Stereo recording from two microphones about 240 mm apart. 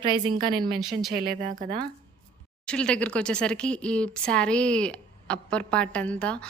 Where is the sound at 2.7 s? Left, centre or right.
Centre.